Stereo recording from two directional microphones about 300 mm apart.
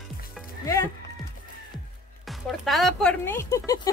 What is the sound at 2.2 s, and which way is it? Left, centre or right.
Speech, centre.